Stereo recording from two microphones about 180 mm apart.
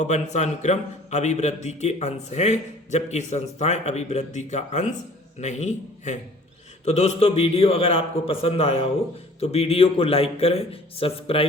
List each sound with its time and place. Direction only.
0.0 s a man's voice: 40° left (ahead or behind)